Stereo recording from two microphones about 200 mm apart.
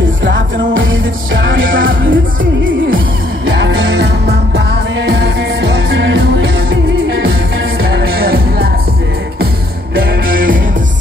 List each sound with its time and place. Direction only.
0.2 s music: 70° right (ahead or behind)
3.5 s music: 60° right (ahead or behind)
9.9 s music: 45° right (ahead or behind)